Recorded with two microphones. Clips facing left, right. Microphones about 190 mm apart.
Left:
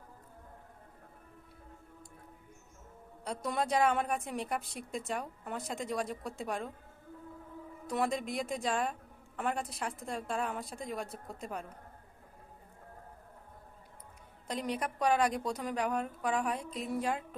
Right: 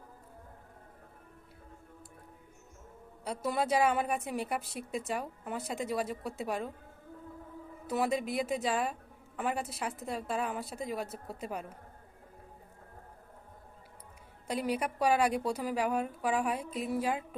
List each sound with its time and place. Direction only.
3.2 s a woman's voice: 5° right (ahead or behind)
7.9 s a woman's voice: 5° right (ahead or behind)
14.4 s a woman's voice: 10° right (ahead or behind)